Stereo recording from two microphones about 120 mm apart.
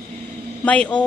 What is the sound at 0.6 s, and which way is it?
Speech, 10° left (ahead or behind).